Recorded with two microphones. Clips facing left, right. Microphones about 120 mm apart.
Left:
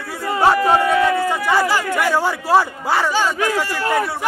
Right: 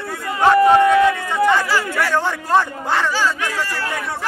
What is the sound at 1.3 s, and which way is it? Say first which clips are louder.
A man's voice: right 1 dB; 5° left (ahead or behind).